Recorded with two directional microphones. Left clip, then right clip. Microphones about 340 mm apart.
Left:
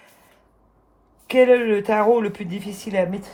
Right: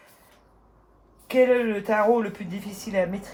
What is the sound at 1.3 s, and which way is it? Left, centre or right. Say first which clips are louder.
Speech: left 5 dB; left.